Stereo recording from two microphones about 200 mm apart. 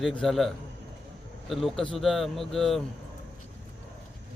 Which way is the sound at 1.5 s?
Centre (ahead or behind).